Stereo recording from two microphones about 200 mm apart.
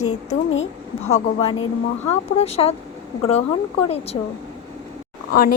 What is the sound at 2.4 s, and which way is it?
Speech, 30° left (ahead or behind).